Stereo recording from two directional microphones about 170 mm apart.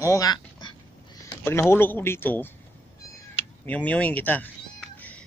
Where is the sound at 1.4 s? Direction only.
15° left (ahead or behind).